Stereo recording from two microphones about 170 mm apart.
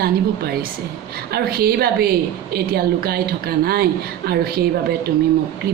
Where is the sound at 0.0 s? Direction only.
65° right (ahead or behind).